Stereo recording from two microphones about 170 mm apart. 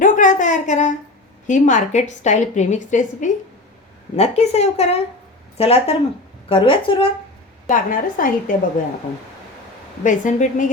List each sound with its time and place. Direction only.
0.0 s a sound: 50° left (ahead or behind)
1.5 s a woman's voice: 50° left (ahead or behind); by 7.1 s 30° left (ahead or behind)
7.7 s a woman's voice: 55° left (ahead or behind)
10.0 s a woman's voice: 50° left (ahead or behind)